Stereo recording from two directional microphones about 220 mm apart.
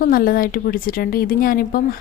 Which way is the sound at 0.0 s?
40° left (ahead or behind).